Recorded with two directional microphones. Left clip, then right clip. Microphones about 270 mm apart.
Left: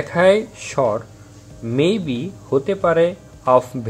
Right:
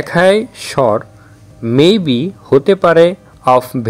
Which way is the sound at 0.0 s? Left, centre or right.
Right.